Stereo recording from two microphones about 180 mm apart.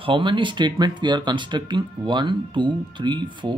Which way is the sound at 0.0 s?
25° right (ahead or behind).